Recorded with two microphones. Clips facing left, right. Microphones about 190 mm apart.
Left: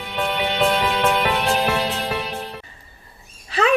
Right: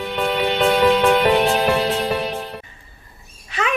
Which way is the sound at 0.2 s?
Centre (ahead or behind).